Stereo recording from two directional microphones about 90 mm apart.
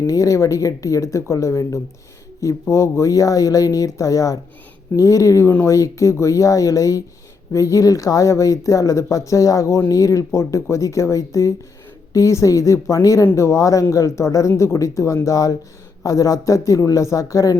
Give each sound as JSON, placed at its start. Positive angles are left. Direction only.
{"t": 0.0, "sound": "speech", "side_deg": 35}